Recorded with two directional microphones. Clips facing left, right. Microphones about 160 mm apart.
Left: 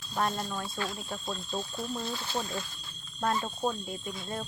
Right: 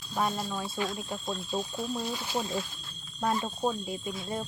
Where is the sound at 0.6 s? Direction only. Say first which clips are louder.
Right 3 dB; 20° right (ahead or behind).